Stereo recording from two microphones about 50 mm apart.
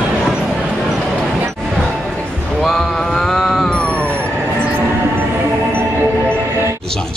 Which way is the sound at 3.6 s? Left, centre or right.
Left.